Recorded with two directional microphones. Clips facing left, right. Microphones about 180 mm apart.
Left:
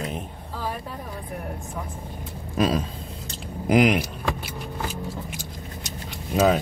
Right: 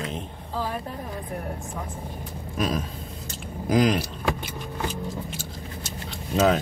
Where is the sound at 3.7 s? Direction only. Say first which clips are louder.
Left 2 dB; 15° left (ahead or behind).